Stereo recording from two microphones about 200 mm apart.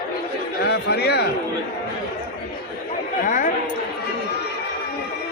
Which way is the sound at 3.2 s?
40° left (ahead or behind).